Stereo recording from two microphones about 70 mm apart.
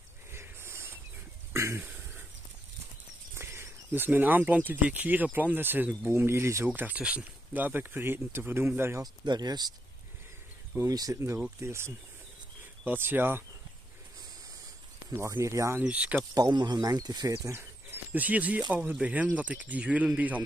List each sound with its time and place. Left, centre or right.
0.3 s a sound: right
1.5 s throat clearing: right
1.8 s a sound: right
3.3 s speech: right
6.7 s speech: right
9.0 s speech: right
10.9 s speech: right
11.6 s speech: right
15.0 s speech: right
15.8 s speech: centre
16.3 s speech: right
18.1 s speech: right